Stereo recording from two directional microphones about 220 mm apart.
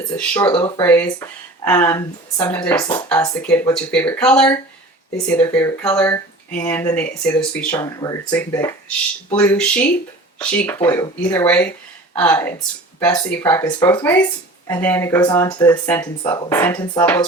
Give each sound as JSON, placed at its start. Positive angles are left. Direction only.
{"t": 0.2, "sound": "speech", "side_deg": 15}
{"t": 7.8, "sound": "speech", "side_deg": 15}